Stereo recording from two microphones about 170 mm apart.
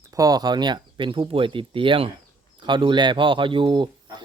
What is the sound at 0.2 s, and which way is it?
Speech, 20° right (ahead or behind).